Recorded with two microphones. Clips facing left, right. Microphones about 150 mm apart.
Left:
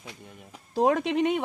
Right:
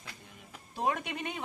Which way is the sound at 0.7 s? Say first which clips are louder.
Left 10 dB; 90° left.